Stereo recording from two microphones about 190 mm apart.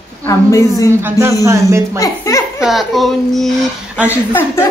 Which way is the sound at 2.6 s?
Centre (ahead or behind).